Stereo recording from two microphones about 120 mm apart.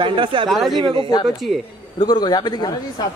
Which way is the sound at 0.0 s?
45° right (ahead or behind).